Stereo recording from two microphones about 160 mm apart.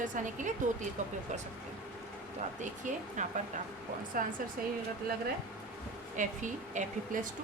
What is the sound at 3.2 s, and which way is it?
Speech, 50° right (ahead or behind).